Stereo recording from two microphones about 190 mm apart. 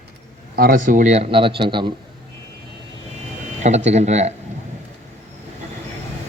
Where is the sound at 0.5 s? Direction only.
50° right (ahead or behind); by 1.9 s 25° right (ahead or behind).